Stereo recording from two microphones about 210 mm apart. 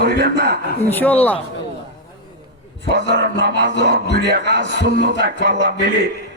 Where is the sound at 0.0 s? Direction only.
50° right (ahead or behind).